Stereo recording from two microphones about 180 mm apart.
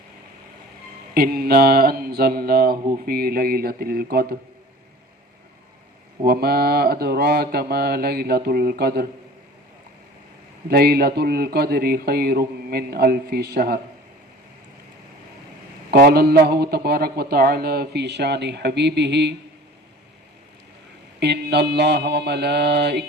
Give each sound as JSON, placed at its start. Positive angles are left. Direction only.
{"t": 1.1, "sound": "a man's voice", "side_deg": -60}
{"t": 6.2, "sound": "a man's voice", "side_deg": -55}
{"t": 10.7, "sound": "a man's voice", "side_deg": -60}
{"t": 15.9, "sound": "a man's voice", "side_deg": -60}
{"t": 21.2, "sound": "mantra", "side_deg": -70}